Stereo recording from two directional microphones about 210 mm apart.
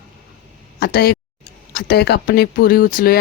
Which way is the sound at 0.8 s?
50° left (ahead or behind).